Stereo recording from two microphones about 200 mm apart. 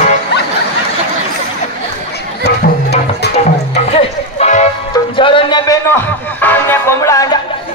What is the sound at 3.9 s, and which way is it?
Music, 35° left (ahead or behind).